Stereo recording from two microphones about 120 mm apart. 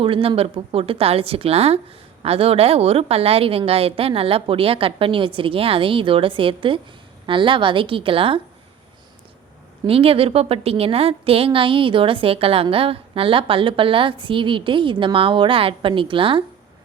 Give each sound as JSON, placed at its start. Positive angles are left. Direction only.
{"t": 0.0, "sound": "a woman's voice", "side_deg": -50}
{"t": 9.8, "sound": "a woman's voice", "side_deg": -50}